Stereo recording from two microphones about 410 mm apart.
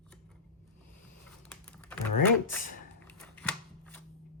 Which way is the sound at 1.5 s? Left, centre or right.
Centre.